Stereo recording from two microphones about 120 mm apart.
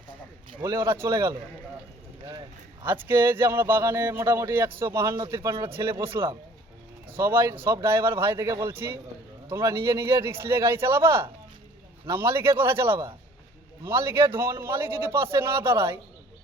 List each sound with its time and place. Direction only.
0.6 s a man's voice: 25° right (ahead or behind)
2.8 s a man's voice: 15° right (ahead or behind)